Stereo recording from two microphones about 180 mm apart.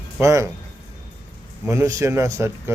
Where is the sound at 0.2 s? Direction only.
15° right (ahead or behind).